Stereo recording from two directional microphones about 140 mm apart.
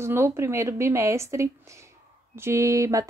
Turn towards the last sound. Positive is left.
turn(degrees=-20)  # may be behind; listen again after turning